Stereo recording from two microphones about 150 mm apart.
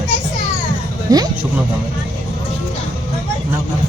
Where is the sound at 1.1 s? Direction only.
25° right (ahead or behind).